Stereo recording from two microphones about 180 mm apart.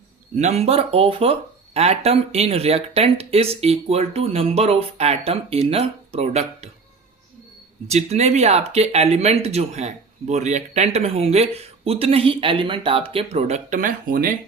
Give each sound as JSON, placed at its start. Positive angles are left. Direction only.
{"t": 0.3, "sound": "speech", "side_deg": -35}
{"t": 7.9, "sound": "speech", "side_deg": -35}